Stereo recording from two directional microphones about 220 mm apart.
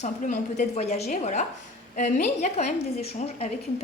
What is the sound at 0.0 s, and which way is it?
A woman's voice, 35° left (ahead or behind).